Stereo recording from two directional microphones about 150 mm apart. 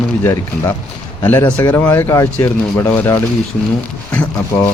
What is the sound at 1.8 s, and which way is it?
Speech, 15° left (ahead or behind).